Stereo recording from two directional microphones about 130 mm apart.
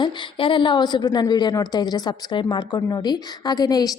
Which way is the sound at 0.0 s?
35° left (ahead or behind).